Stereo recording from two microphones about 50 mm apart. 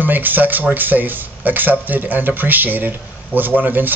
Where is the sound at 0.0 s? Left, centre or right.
Right.